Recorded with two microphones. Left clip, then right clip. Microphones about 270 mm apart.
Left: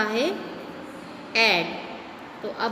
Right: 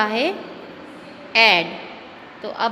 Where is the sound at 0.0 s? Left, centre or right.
Centre.